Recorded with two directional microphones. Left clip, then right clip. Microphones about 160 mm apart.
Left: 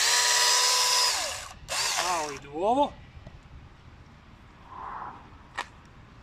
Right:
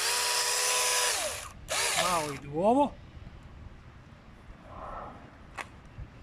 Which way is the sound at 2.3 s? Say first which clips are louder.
Even; 45° right (ahead or behind).